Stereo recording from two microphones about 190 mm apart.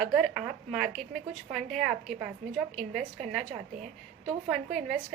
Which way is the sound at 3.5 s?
35° right (ahead or behind).